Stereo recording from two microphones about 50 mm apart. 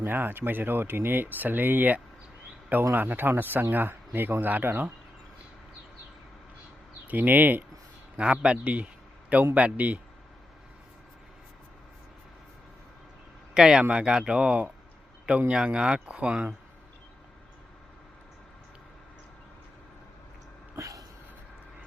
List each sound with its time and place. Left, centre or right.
0.0 s speech: right
7.1 s speech: right
8.2 s speech: centre
13.5 s speech: centre